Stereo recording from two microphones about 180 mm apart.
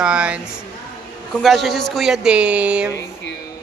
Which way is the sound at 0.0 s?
5° right (ahead or behind).